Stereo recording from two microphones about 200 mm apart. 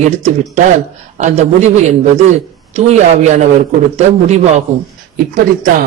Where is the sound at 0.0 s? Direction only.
35° right (ahead or behind).